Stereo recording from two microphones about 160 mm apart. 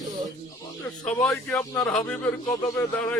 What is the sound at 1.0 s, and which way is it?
A man's voice, 5° left (ahead or behind).